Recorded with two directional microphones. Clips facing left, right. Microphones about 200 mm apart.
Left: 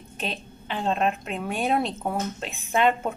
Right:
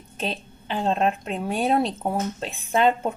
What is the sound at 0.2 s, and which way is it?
A woman's voice, 35° right (ahead or behind).